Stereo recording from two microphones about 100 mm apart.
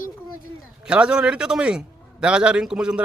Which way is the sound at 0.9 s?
10° right (ahead or behind).